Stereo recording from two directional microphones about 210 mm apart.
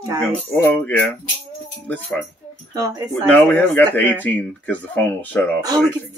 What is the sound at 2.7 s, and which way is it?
Speech, 15° right (ahead or behind).